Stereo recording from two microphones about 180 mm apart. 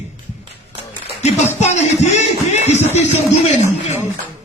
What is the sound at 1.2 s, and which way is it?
A man's voice, 40° left (ahead or behind).